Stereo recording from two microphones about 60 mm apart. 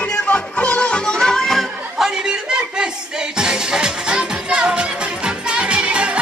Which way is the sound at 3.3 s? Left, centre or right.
Centre.